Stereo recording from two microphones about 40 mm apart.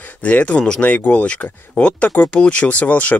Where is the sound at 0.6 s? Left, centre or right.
Left.